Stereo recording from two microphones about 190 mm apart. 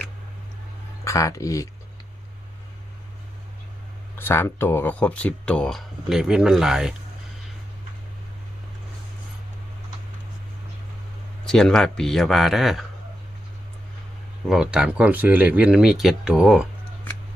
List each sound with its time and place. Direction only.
1.0 s speech: 15° left (ahead or behind)
4.2 s speech: 10° left (ahead or behind)
11.4 s speech: 5° left (ahead or behind)
14.4 s speech: 5° right (ahead or behind)